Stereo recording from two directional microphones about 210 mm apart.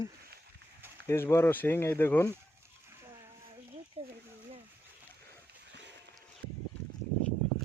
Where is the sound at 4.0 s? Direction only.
30° right (ahead or behind).